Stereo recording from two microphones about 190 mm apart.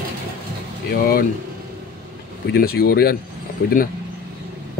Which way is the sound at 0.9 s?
50° left (ahead or behind).